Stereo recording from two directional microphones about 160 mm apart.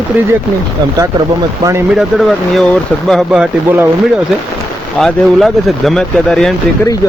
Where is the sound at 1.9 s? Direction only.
Centre (ahead or behind).